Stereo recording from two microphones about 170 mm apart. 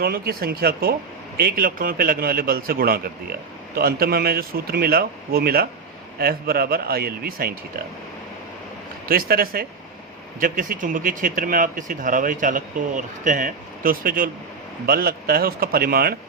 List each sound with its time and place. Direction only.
0.0 s speech: 65° right (ahead or behind)
9.0 s speech: 60° right (ahead or behind)